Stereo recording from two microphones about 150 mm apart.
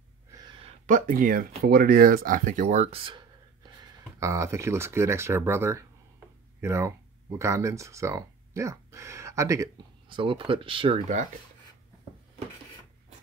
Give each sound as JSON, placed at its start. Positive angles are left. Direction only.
{"t": 0.8, "sound": "speech", "side_deg": -60}
{"t": 1.7, "sound": "speech", "side_deg": -85}
{"t": 4.2, "sound": "speech", "side_deg": -20}
{"t": 10.0, "sound": "speech", "side_deg": -35}